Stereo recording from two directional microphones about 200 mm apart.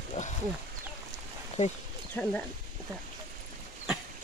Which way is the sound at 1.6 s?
35° left (ahead or behind).